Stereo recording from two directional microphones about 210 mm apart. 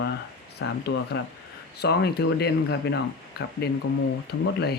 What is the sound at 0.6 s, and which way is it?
Speech, 55° left (ahead or behind).